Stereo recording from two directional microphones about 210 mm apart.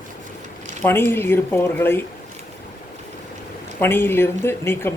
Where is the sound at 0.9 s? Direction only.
10° left (ahead or behind).